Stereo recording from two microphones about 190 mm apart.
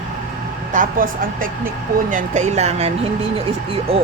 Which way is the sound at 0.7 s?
45° right (ahead or behind).